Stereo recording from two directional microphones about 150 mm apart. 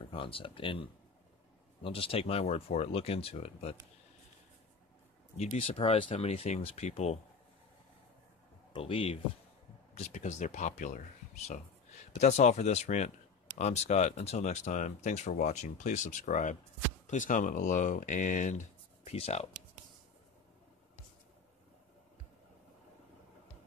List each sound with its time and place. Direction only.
0.0 s speech: 35° left (ahead or behind)
5.4 s speech: 40° left (ahead or behind)
8.7 s speech: 35° left (ahead or behind)
9.9 s speech: 50° left (ahead or behind)
12.2 s speech: 50° left (ahead or behind)